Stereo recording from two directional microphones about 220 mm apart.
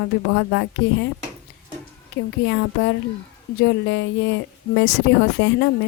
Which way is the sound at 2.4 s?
55° left (ahead or behind).